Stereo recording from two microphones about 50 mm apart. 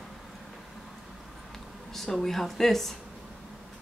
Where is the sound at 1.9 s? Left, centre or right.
Centre.